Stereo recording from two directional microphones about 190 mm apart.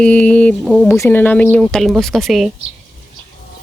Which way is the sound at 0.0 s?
5° left (ahead or behind).